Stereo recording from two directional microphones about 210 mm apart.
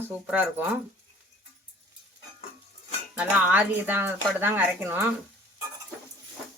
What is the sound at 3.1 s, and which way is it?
Speech, 5° right (ahead or behind).